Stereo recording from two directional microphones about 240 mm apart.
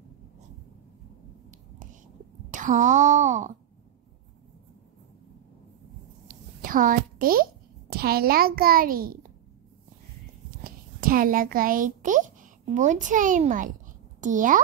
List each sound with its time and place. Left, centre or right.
2.5 s a child's voice: right
6.2 s a sound: right
7.9 s a child's voice: right
10.6 s a child's voice: right